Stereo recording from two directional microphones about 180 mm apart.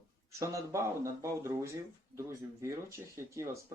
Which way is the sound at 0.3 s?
15° right (ahead or behind).